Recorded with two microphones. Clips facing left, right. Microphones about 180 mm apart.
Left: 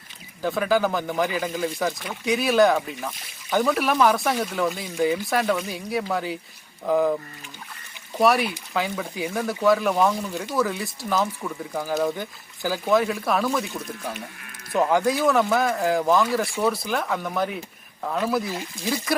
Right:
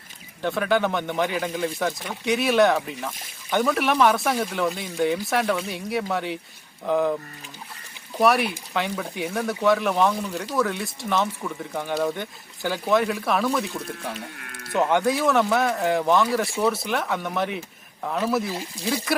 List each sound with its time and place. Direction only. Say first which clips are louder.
0.4 s speech: left 1 dB; centre (ahead or behind)
8.2 s speech: even; centre (ahead or behind)